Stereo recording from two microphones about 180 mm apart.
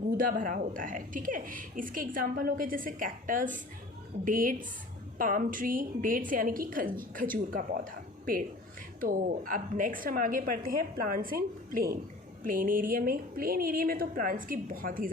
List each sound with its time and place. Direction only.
0.2 s speech: 50° right (ahead or behind)